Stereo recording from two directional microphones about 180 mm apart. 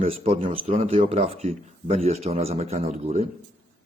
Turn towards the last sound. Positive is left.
turn(degrees=-35)  # may be behind; listen again after turning